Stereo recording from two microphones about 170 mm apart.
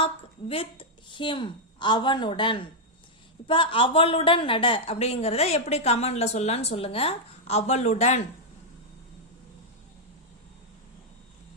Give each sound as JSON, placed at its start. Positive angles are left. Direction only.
{"t": 0.0, "sound": "a woman's voice", "side_deg": 35}